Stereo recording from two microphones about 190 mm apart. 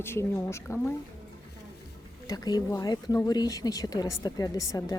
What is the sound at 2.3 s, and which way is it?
Speech, 20° left (ahead or behind).